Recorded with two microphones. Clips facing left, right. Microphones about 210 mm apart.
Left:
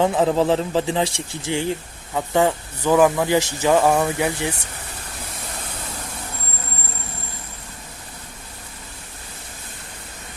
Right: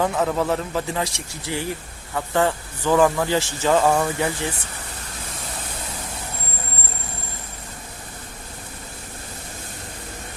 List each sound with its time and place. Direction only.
0.0 s speech: 25° left (ahead or behind)
2.1 s speech: 15° left (ahead or behind)